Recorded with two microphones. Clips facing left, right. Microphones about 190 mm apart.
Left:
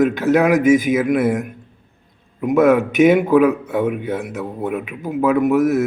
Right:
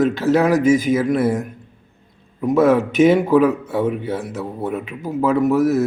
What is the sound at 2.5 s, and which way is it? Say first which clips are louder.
Speech: left 1 dB; 15° left (ahead or behind).